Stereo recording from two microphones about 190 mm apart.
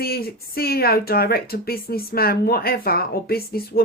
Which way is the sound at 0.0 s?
55° left (ahead or behind).